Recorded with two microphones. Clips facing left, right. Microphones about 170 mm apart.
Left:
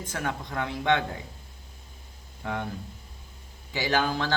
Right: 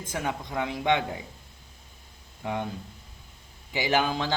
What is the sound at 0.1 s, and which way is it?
Speech, 15° right (ahead or behind).